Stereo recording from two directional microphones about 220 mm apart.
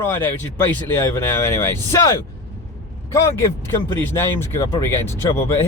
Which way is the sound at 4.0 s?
10° left (ahead or behind).